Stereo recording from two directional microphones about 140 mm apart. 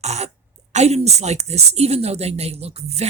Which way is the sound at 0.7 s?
50° right (ahead or behind).